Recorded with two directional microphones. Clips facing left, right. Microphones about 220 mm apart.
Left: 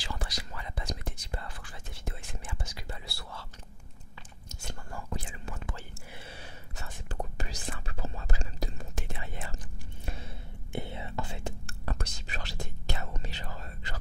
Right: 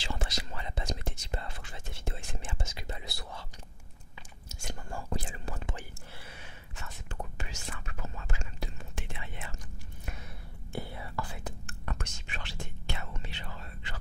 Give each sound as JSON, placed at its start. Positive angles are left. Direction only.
{"t": 0.0, "sound": "whispering", "side_deg": -25}
{"t": 4.9, "sound": "whispering", "side_deg": -35}
{"t": 6.1, "sound": "whispering", "side_deg": 30}
{"t": 10.7, "sound": "whispering", "side_deg": 20}